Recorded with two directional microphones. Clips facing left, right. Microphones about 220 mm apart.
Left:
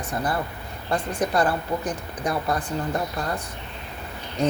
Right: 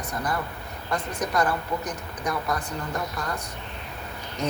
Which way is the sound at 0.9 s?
30° left (ahead or behind).